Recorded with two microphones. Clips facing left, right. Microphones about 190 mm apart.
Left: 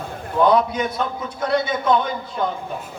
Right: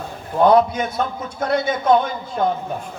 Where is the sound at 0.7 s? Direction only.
50° right (ahead or behind).